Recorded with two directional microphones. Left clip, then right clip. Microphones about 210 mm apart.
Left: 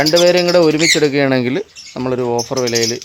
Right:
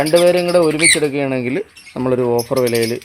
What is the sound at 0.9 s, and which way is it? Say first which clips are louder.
Speech: left 3 dB; 25° left (ahead or behind).